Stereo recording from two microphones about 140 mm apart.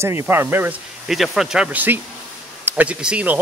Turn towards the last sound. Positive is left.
turn(degrees=-10)  # may be behind; listen again after turning